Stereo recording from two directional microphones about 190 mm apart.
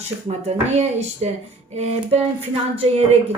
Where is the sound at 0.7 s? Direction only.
35° right (ahead or behind).